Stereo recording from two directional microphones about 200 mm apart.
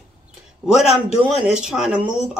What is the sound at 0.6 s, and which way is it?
Speech, 5° right (ahead or behind).